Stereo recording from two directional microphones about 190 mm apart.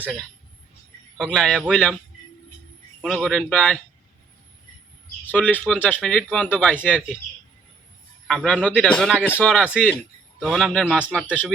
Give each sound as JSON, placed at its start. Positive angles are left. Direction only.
{"t": 1.2, "sound": "a man's voice", "side_deg": 0}
{"t": 3.0, "sound": "a man's voice", "side_deg": 0}
{"t": 5.3, "sound": "a man's voice", "side_deg": 10}
{"t": 8.3, "sound": "a man's voice", "side_deg": 0}